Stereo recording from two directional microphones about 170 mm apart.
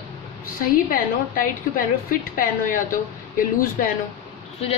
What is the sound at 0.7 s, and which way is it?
A woman's voice, 55° left (ahead or behind).